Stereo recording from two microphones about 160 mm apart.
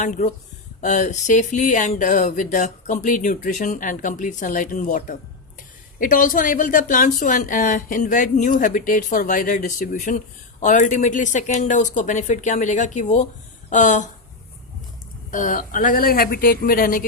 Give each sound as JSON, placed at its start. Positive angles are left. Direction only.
{"t": 0.0, "sound": "a woman's voice", "side_deg": 50}
{"t": 15.3, "sound": "a woman's voice", "side_deg": 55}